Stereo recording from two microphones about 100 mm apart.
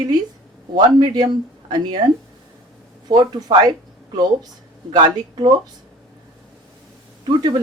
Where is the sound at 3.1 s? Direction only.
40° right (ahead or behind).